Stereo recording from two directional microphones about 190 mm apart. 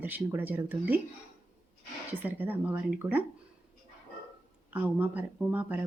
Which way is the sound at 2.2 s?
10° right (ahead or behind).